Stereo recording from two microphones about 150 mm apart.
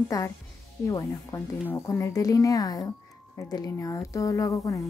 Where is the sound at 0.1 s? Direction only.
25° left (ahead or behind).